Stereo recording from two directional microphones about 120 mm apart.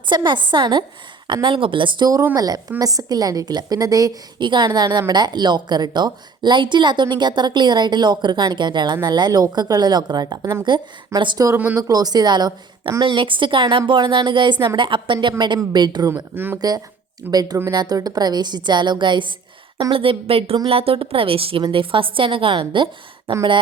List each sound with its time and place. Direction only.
0.3 s a woman's voice: 40° right (ahead or behind)
2.3 s a woman's voice: 30° right (ahead or behind)
11.4 s speech: 15° right (ahead or behind)
11.8 s a woman's voice: 30° right (ahead or behind)
16.3 s speech: 15° right (ahead or behind)
16.6 s a woman's voice: 35° right (ahead or behind)
17.2 s speech: 15° right (ahead or behind)
17.7 s a woman's voice: 35° right (ahead or behind)